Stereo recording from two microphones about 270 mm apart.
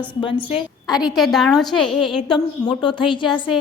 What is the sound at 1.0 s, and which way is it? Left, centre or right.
A woman's voice, centre.